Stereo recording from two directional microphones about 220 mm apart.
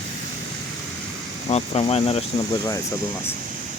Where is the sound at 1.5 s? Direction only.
25° left (ahead or behind).